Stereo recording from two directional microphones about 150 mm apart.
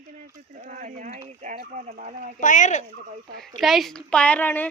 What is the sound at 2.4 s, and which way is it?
Speech, 55° left (ahead or behind).